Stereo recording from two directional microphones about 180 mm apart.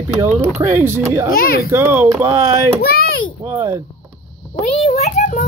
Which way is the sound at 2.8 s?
60° left (ahead or behind).